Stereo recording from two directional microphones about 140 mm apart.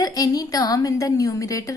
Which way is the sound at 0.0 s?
25° left (ahead or behind).